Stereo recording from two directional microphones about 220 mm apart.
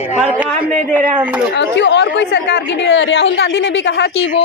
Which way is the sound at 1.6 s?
55° left (ahead or behind).